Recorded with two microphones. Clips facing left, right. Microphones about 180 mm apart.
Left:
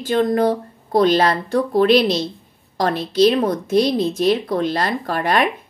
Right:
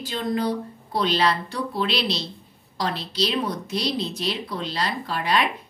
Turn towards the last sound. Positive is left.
turn(degrees=50)  # may be behind; listen again after turning